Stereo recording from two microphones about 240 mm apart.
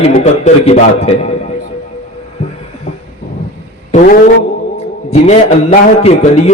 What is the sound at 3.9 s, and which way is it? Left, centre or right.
A man's voice, left.